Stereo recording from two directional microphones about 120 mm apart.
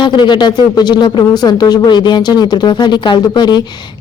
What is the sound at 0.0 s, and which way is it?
Speech, 40° left (ahead or behind).